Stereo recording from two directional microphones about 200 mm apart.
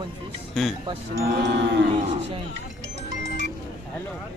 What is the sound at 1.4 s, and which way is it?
Cattle, 60° right (ahead or behind).